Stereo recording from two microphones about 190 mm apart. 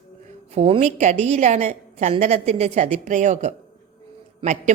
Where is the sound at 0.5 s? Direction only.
35° right (ahead or behind).